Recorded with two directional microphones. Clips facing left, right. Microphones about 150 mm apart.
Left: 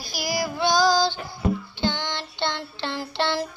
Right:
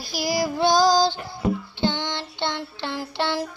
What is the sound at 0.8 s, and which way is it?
Female singing, 40° right (ahead or behind).